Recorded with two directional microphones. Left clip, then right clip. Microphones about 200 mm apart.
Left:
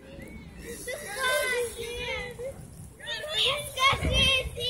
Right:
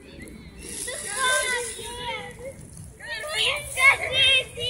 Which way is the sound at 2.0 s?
55° left (ahead or behind).